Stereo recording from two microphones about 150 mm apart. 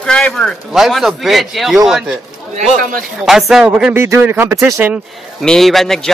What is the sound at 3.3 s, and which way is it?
Speech, centre (ahead or behind).